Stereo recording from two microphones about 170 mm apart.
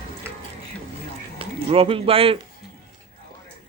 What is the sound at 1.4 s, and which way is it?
Speech, 35° right (ahead or behind).